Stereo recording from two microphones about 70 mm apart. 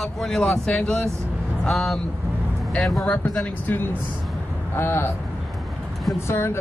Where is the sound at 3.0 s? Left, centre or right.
Left.